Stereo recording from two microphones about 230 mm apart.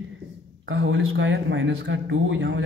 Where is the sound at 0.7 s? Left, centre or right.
Right.